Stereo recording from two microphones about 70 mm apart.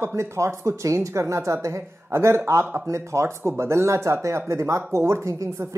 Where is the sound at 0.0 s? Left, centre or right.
Right.